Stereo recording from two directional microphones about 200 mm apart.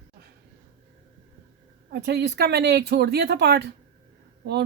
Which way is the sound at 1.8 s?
55° right (ahead or behind).